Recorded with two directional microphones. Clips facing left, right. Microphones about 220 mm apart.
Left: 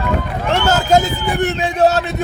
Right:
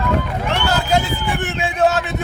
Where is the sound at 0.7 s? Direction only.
40° left (ahead or behind).